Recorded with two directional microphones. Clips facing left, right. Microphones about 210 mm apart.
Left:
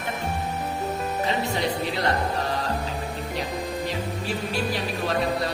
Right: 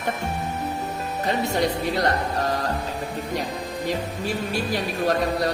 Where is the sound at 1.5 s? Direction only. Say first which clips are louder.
Right 3 dB; 45° right (ahead or behind).